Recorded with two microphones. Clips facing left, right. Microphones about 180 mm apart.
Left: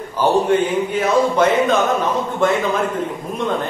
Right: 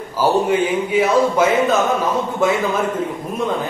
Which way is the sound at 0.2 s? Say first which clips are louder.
Left 1 dB; 5° right (ahead or behind).